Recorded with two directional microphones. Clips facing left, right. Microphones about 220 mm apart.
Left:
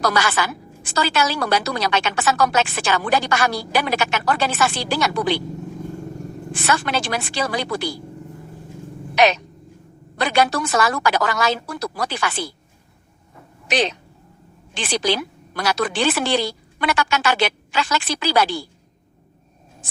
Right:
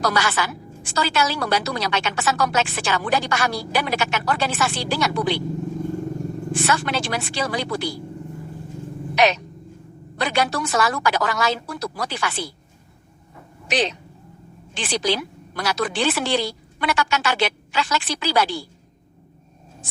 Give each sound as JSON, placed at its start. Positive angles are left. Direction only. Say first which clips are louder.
{"t": 0.0, "sound": "a woman's voice", "louder": "left 2 dB", "side_deg": 90}
{"t": 6.5, "sound": "a woman's voice", "louder": "left 1 dB", "side_deg": 90}
{"t": 9.1, "sound": "a woman's voice", "louder": "left 2 dB", "side_deg": 90}
{"t": 13.7, "sound": "a woman's voice", "louder": "left 2 dB", "side_deg": 90}